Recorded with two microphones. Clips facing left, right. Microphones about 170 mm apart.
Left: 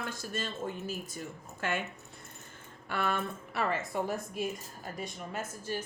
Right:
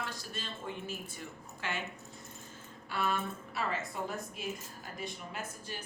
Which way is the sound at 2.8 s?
55° left (ahead or behind).